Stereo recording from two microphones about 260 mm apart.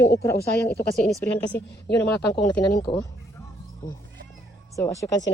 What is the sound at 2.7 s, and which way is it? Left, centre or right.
Speech, centre.